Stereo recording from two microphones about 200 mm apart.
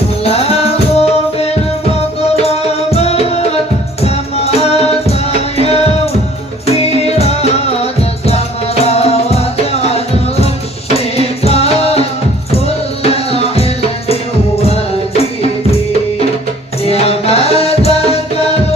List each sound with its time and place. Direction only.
0.3 s tabla: 30° left (ahead or behind)
2.3 s music: 30° left (ahead or behind)
16.8 s music: 30° left (ahead or behind)